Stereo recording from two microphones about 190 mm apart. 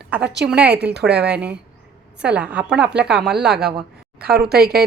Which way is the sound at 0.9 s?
60° right (ahead or behind).